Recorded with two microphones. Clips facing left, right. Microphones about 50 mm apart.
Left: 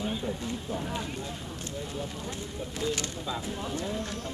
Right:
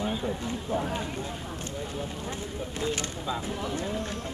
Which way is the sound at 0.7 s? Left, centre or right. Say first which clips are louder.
Right 6 dB; right.